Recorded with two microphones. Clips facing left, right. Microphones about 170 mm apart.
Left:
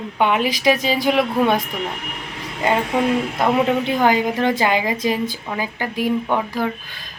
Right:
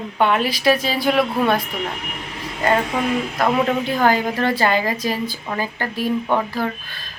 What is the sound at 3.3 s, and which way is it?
A woman's voice, 20° left (ahead or behind).